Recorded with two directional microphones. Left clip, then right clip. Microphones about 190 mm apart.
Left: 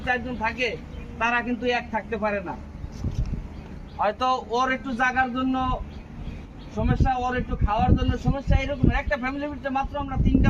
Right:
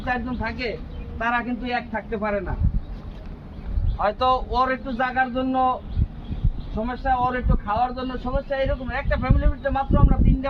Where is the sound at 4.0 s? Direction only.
25° right (ahead or behind).